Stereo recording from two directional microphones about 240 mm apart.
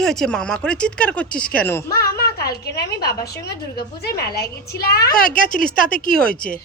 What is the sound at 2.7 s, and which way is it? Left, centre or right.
A woman's voice, left.